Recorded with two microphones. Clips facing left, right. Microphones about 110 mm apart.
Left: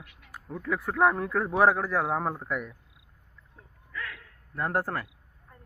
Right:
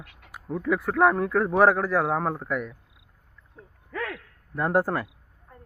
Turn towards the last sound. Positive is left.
turn(degrees=-15)  # may be behind; listen again after turning